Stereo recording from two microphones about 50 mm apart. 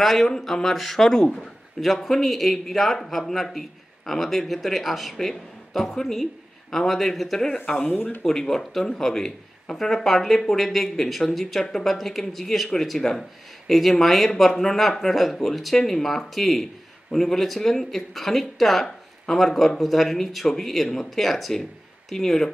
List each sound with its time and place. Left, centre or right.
0.0 s a man's voice: centre
7.9 s speech: left
8.2 s a man's voice: centre